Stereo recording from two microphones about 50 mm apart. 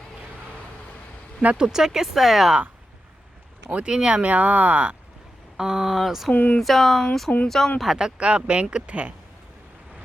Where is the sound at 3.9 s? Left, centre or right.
Centre.